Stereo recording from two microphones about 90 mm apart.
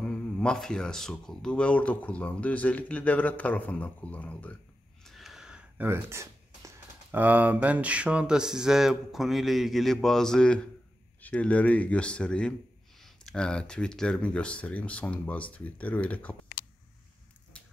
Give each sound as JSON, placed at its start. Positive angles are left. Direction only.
{"t": 0.0, "sound": "speech", "side_deg": 10}
{"t": 5.0, "sound": "a sound", "side_deg": 0}
{"t": 5.8, "sound": "speech", "side_deg": -25}